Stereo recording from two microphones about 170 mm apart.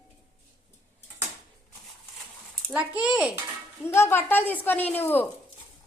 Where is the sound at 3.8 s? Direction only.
15° left (ahead or behind).